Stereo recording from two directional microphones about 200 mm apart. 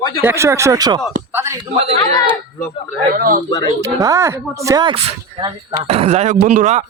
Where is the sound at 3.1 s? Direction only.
45° right (ahead or behind).